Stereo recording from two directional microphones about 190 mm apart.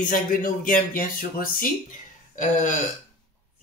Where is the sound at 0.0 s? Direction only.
45° left (ahead or behind).